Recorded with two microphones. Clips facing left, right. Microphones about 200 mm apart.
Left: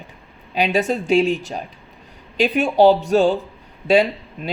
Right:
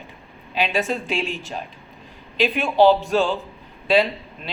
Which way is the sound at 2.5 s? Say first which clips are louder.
Left 2 dB; 45° left (ahead or behind).